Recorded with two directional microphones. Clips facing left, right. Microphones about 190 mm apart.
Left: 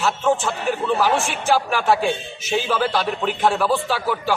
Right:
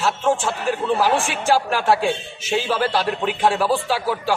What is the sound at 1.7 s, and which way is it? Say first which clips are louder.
A man's voice: even; 5° right (ahead or behind).